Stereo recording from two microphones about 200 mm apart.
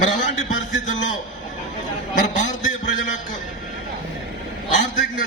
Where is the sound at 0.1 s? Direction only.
40° left (ahead or behind).